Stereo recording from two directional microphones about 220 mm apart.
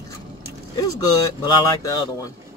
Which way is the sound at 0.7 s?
20° left (ahead or behind).